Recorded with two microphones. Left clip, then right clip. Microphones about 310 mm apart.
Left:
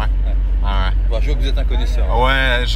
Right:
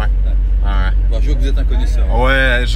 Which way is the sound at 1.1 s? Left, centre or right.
Left.